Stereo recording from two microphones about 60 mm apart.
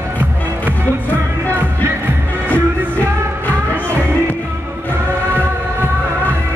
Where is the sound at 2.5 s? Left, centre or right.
Left.